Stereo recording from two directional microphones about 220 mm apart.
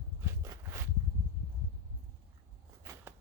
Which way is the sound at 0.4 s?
15° right (ahead or behind).